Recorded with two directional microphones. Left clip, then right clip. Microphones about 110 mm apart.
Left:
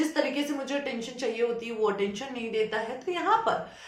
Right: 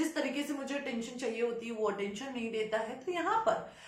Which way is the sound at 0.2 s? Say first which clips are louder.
Left 7 dB; 25° left (ahead or behind).